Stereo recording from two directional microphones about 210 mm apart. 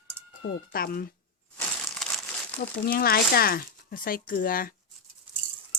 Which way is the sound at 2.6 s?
45° left (ahead or behind).